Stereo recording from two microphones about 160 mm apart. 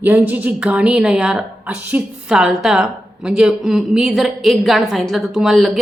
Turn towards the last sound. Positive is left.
turn(degrees=-5)  # may be behind; listen again after turning